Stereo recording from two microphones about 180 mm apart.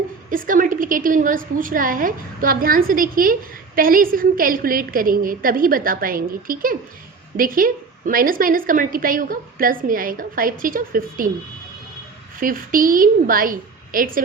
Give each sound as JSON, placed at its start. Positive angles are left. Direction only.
{"t": 0.3, "sound": "a woman's voice", "side_deg": -50}
{"t": 12.4, "sound": "a woman's voice", "side_deg": -50}